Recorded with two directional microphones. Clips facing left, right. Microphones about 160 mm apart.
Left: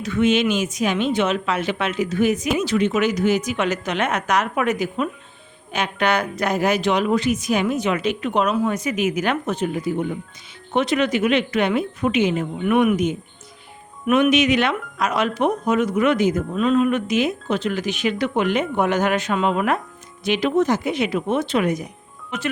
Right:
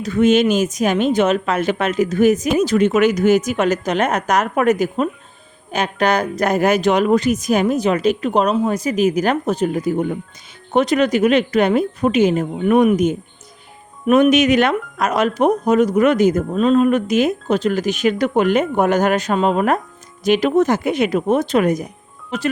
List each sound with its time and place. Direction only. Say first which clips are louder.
0.0 s a woman's voice: right 4 dB; 40° right (ahead or behind)